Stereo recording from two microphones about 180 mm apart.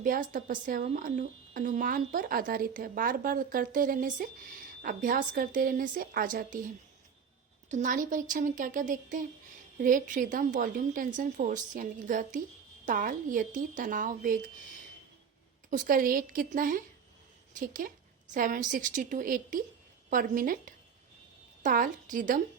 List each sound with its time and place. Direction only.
0.0 s speech: 50° right (ahead or behind)
7.7 s speech: 45° right (ahead or behind)
15.7 s speech: 50° right (ahead or behind)